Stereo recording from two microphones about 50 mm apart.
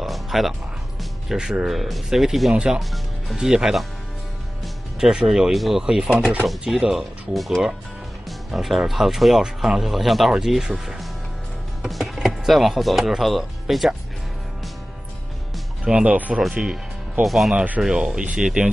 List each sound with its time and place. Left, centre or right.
0.0 s music: centre
1.3 s speech: centre
1.7 s speech: centre
2.5 s speech: centre
2.8 s speech: centre
3.3 s speech: centre
5.0 s speech: centre
11.8 s music: centre
12.4 s speech: centre
15.8 s speech: centre
17.2 s speech: centre
17.8 s speech: centre